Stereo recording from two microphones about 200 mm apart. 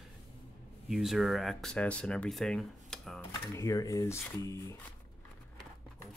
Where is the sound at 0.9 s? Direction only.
Centre (ahead or behind).